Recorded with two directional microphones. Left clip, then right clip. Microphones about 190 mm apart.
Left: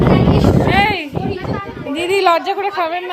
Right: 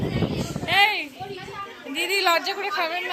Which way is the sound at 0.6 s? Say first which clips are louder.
Left 5 dB; 15° left (ahead or behind).